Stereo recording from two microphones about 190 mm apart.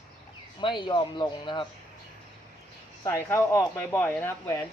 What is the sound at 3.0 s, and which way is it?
Speech, 15° left (ahead or behind).